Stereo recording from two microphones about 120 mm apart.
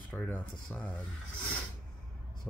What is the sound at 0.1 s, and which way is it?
Speech, 10° left (ahead or behind).